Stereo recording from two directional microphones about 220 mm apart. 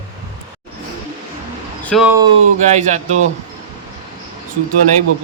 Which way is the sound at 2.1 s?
15° right (ahead or behind).